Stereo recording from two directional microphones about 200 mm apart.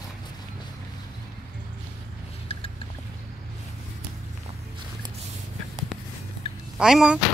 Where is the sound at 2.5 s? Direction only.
30° left (ahead or behind).